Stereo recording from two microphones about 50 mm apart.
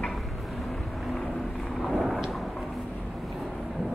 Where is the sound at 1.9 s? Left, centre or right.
Centre.